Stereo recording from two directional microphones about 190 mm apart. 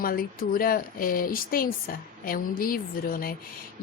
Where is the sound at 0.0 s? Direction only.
50° left (ahead or behind).